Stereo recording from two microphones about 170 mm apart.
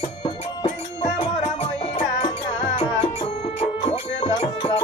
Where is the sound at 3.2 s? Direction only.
35° left (ahead or behind).